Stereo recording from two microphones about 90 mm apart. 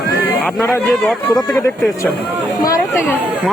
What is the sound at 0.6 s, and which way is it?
Speech, 30° left (ahead or behind).